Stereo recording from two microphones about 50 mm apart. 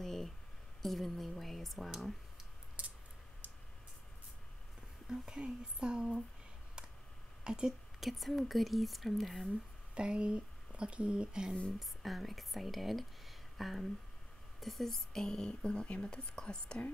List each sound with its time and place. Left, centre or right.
0.0 s a sound: centre
0.8 s speech: centre
5.0 s speech: centre
7.4 s speech: centre
8.0 s speech: centre
9.9 s speech: centre
11.8 s speech: centre